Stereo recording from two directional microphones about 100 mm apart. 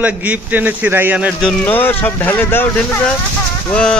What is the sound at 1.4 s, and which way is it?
Speech, 20° left (ahead or behind).